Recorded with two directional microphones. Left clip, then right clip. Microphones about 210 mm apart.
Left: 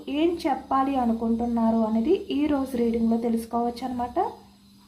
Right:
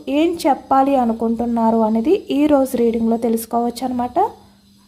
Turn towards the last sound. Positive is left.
turn(degrees=-55)  # may be behind; listen again after turning